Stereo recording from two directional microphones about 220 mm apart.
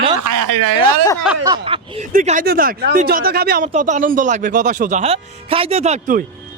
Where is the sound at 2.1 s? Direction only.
35° right (ahead or behind).